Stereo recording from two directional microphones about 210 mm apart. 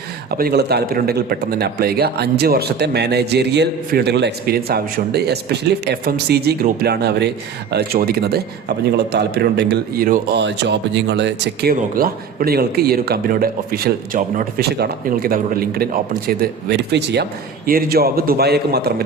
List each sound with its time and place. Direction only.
0.3 s a man's voice: 50° right (ahead or behind)